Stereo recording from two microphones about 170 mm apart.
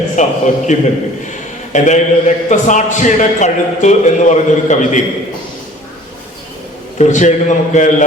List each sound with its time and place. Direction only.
0.2 s a man's voice: 45° left (ahead or behind)
7.0 s a man's voice: 45° left (ahead or behind)